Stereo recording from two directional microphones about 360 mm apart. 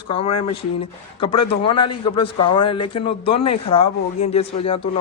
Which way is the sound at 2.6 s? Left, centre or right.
Left.